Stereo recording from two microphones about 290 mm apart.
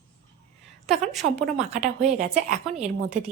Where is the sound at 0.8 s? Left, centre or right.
Centre.